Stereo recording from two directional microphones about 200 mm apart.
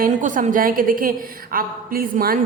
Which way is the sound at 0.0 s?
40° right (ahead or behind).